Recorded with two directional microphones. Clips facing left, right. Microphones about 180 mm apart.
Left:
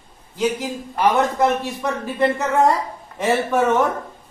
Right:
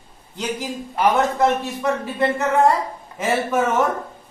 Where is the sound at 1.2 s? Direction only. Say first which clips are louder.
Even; centre (ahead or behind).